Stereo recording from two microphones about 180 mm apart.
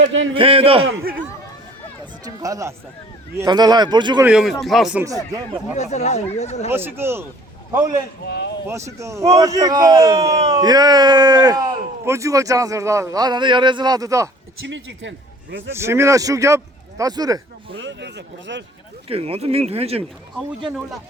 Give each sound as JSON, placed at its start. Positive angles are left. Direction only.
{"t": 0.0, "sound": "speech", "side_deg": -90}
{"t": 0.3, "sound": "speech", "side_deg": -30}
{"t": 2.2, "sound": "a man's voice", "side_deg": -20}
{"t": 4.2, "sound": "speech", "side_deg": -5}
{"t": 5.0, "sound": "a man's voice", "side_deg": -20}
{"t": 5.7, "sound": "speech", "side_deg": 40}
{"t": 6.7, "sound": "a man's voice", "side_deg": -10}
{"t": 8.2, "sound": "speech", "side_deg": 70}
{"t": 9.0, "sound": "a man's voice", "side_deg": -15}
{"t": 14.7, "sound": "a man's voice", "side_deg": -90}
{"t": 15.7, "sound": "a man's voice", "side_deg": -15}
{"t": 17.7, "sound": "speech", "side_deg": -90}
{"t": 19.0, "sound": "speech", "side_deg": -30}